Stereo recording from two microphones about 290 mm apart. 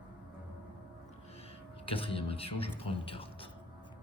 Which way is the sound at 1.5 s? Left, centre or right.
Centre.